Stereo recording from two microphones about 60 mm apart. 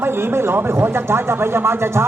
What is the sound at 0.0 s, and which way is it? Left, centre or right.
Speech, right.